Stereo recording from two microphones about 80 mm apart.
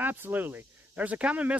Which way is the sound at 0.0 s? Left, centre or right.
Right.